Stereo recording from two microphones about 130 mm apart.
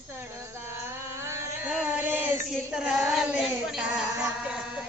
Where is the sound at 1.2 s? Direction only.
20° right (ahead or behind).